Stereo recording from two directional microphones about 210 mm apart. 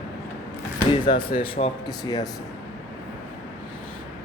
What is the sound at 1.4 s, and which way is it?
Speech, 25° left (ahead or behind).